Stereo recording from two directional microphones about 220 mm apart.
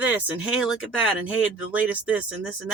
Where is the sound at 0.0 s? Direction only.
5° right (ahead or behind).